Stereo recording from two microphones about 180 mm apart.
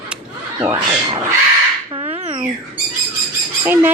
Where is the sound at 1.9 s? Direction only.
30° right (ahead or behind).